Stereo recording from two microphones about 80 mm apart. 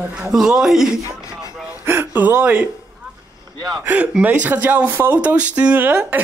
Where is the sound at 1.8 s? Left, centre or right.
Right.